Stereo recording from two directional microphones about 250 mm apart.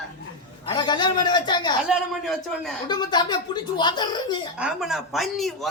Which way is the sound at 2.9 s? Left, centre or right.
Centre.